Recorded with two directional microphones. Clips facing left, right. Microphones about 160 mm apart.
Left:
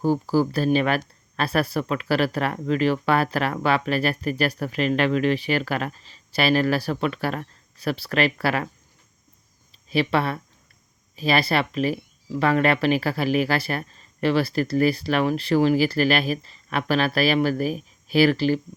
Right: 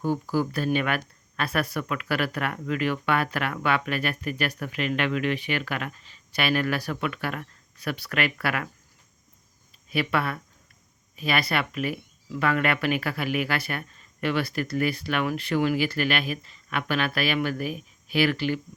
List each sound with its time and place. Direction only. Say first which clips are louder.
0.0 s speech: left 5 dB; 35° left (ahead or behind)
9.9 s speech: left 4 dB; 30° left (ahead or behind)